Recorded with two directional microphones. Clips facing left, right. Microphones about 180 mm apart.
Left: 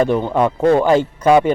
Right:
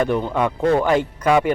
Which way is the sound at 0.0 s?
35° left (ahead or behind).